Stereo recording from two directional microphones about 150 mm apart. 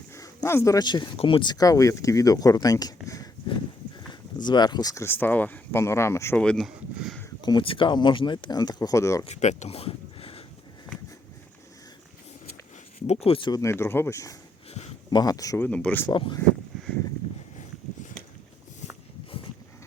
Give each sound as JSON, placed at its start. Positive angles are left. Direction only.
{"t": 0.1, "sound": "speech", "side_deg": 20}
{"t": 4.4, "sound": "speech", "side_deg": 30}
{"t": 6.4, "sound": "speech", "side_deg": 5}
{"t": 7.4, "sound": "speech", "side_deg": 35}
{"t": 9.2, "sound": "speech", "side_deg": 50}
{"t": 13.1, "sound": "speech", "side_deg": 40}
{"t": 13.5, "sound": "speech", "side_deg": 20}
{"t": 15.6, "sound": "speech", "side_deg": 10}
{"t": 16.0, "sound": "speech", "side_deg": 30}